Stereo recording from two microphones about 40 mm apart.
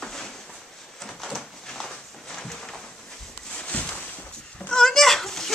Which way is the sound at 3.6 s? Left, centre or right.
Left.